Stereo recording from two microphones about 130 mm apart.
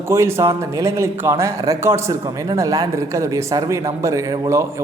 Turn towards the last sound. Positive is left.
turn(degrees=-25)  # may be behind; listen again after turning